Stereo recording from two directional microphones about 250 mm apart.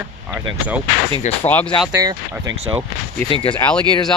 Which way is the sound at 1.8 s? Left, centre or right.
Centre.